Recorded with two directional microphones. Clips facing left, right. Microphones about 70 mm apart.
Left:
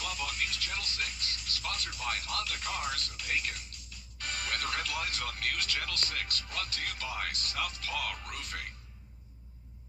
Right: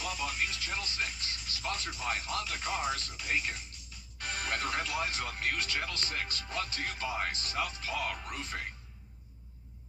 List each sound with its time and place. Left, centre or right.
0.0 s speech: centre